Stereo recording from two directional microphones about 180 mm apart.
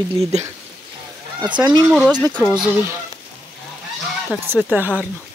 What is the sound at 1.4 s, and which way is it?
Speech, 25° right (ahead or behind).